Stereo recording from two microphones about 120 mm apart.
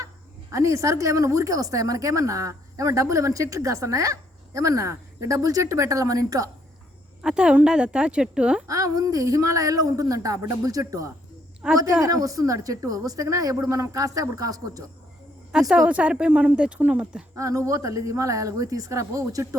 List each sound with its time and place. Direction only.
0.5 s a woman's voice: 25° right (ahead or behind)
7.2 s a woman's voice: 5° right (ahead or behind)
8.6 s a woman's voice: 25° right (ahead or behind)
11.6 s a woman's voice: 10° right (ahead or behind)
12.0 s a woman's voice: 30° right (ahead or behind)
15.7 s a woman's voice: 10° right (ahead or behind)
17.3 s a woman's voice: 25° right (ahead or behind)